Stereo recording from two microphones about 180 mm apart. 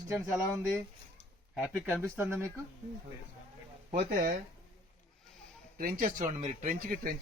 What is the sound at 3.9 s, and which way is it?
Speech, 60° right (ahead or behind).